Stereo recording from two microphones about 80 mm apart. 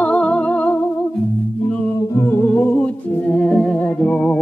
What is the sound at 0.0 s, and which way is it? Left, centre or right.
Music, centre.